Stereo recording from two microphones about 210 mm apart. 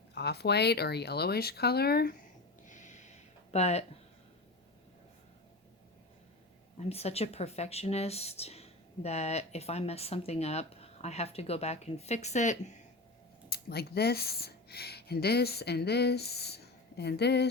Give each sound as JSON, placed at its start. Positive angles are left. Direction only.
{"t": 0.1, "sound": "speech", "side_deg": 50}
{"t": 2.6, "sound": "a sound", "side_deg": 35}
{"t": 3.5, "sound": "speech", "side_deg": 30}
{"t": 6.7, "sound": "speech", "side_deg": 30}
{"t": 13.5, "sound": "speech", "side_deg": 50}